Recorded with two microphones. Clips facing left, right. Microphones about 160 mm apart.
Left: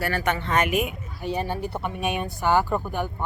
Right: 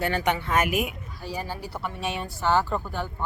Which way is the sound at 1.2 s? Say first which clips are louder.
Left 6 dB; 20° left (ahead or behind).